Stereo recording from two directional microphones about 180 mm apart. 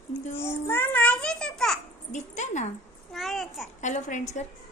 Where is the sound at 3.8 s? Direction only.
40° left (ahead or behind).